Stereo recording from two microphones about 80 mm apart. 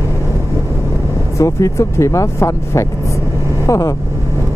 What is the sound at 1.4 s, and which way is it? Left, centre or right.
Speech, left.